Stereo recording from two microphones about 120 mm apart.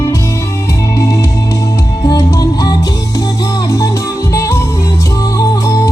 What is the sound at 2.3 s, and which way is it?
Music, 30° left (ahead or behind).